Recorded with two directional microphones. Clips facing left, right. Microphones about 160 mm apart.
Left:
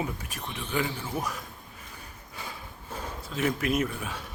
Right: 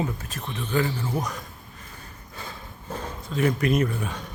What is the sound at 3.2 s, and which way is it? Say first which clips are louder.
A man's voice: right 5 dB; 5° left (ahead or behind).